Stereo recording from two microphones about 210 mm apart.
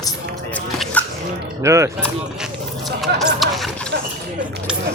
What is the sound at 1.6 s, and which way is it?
Speech, 15° right (ahead or behind).